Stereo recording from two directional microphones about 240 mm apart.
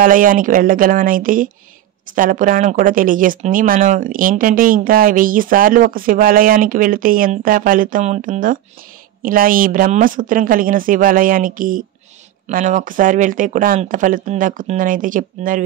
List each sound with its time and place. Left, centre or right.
0.0 s speech: right